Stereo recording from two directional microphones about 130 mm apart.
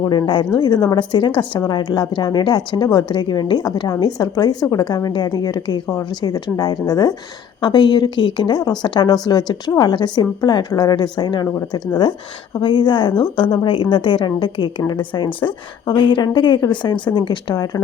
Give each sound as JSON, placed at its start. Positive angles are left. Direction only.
{"t": 0.0, "sound": "a woman's voice", "side_deg": 35}